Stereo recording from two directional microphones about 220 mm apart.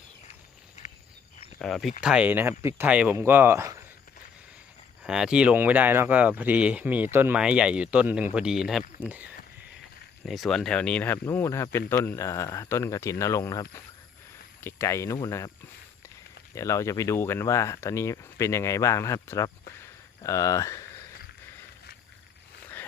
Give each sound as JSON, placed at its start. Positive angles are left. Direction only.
{"t": 0.8, "sound": "a sound", "side_deg": 30}
{"t": 1.5, "sound": "speech", "side_deg": 0}
{"t": 5.0, "sound": "speech", "side_deg": -5}
{"t": 16.6, "sound": "speech", "side_deg": 15}